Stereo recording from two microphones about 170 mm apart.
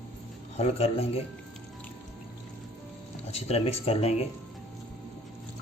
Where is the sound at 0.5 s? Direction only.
40° left (ahead or behind).